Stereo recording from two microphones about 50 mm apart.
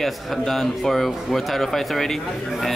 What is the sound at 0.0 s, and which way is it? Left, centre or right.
Speech, centre.